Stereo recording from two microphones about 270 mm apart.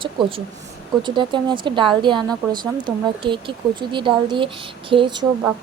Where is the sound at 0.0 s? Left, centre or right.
Centre.